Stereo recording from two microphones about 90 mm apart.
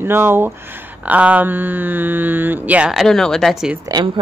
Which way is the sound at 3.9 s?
35° right (ahead or behind).